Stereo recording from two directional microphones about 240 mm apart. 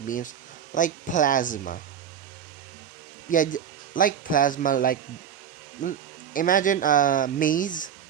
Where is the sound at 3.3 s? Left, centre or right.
Left.